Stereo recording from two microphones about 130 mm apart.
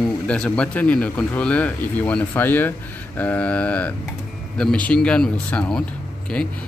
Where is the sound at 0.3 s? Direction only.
10° left (ahead or behind).